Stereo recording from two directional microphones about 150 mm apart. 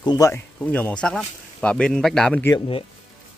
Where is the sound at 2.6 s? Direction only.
35° left (ahead or behind).